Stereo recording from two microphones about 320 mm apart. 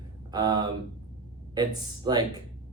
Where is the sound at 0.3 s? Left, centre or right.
Centre.